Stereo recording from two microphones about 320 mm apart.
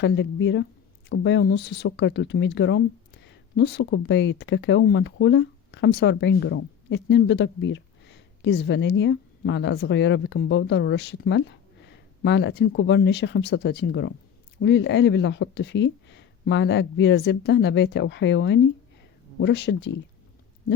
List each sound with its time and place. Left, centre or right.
0.0 s speech: left